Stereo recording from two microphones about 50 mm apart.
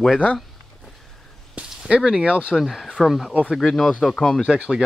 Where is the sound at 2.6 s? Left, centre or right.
Centre.